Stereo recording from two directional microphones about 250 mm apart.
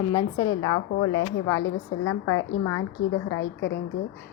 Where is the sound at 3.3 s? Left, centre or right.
Left.